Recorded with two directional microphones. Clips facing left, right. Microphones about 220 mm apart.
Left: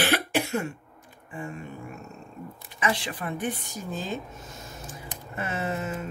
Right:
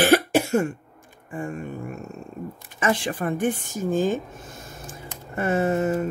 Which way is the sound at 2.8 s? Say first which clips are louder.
Right 5 dB; 50° right (ahead or behind).